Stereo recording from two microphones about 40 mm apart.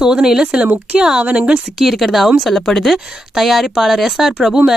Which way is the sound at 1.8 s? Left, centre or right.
Centre.